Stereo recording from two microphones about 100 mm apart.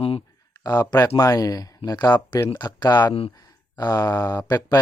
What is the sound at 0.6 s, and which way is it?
Speech, 40° left (ahead or behind).